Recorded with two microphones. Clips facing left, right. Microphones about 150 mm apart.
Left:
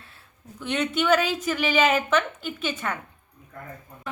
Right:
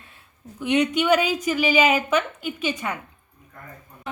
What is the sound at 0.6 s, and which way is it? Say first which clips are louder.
A woman's voice: right 4 dB; 15° right (ahead or behind).